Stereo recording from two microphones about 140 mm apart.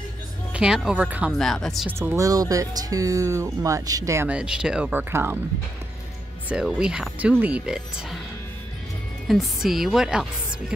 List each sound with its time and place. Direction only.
0.5 s speech: 5° right (ahead or behind)
1.3 s speech: 5° left (ahead or behind)
1.9 s speech: 15° right (ahead or behind)
4.3 s speech: 5° right (ahead or behind)
6.5 s speech: 5° right (ahead or behind)
9.3 s speech: centre (ahead or behind)